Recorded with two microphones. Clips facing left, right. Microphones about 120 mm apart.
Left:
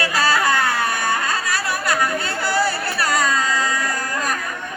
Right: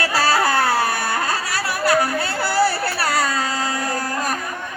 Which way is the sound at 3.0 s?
35° right (ahead or behind).